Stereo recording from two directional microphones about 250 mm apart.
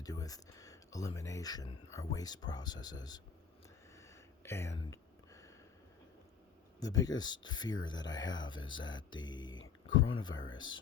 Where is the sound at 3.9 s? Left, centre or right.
Centre.